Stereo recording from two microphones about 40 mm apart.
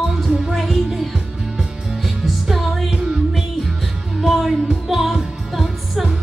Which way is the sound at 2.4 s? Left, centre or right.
Centre.